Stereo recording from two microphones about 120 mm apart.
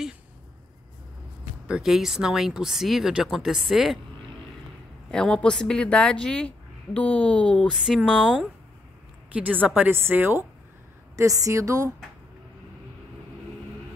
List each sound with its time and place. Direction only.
1.7 s speech: centre (ahead or behind)
5.1 s a woman's voice: 5° left (ahead or behind)
7.8 s speech: centre (ahead or behind)
9.8 s a woman's voice: 15° right (ahead or behind)